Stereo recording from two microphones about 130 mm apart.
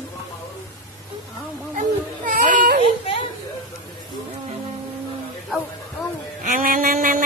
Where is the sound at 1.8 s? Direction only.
90° right.